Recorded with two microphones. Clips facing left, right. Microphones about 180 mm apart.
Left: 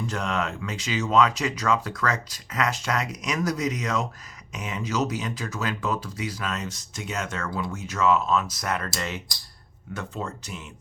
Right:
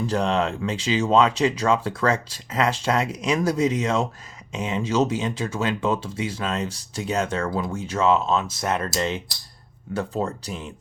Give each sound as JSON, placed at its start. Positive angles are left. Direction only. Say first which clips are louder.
{"t": 0.1, "sound": "speech", "louder": "right 6 dB", "side_deg": -30}